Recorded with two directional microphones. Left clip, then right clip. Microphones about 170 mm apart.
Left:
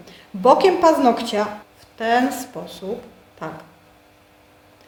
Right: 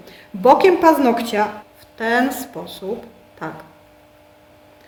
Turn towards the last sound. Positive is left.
turn(degrees=-20)  # may be behind; listen again after turning